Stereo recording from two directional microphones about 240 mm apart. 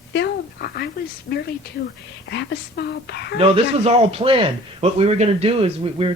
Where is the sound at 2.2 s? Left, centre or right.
Left.